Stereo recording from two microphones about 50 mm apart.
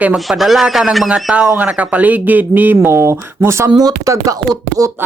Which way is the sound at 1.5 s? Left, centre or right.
Right.